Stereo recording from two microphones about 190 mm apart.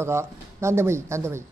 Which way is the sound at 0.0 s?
15° right (ahead or behind).